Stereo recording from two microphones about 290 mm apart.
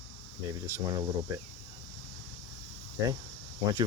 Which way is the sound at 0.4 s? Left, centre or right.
Centre.